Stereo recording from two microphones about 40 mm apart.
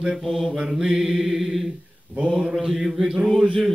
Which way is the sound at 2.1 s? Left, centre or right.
Right.